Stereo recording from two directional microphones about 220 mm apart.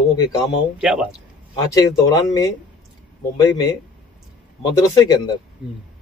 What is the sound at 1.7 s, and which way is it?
Speech, 15° left (ahead or behind).